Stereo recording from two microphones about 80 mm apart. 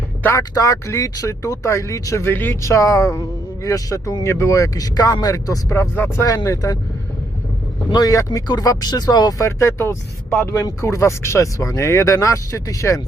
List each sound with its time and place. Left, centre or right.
0.3 s speech: left
2.6 s speech: left
6.2 s speech: left
7.9 s speech: left
9.4 s speech: left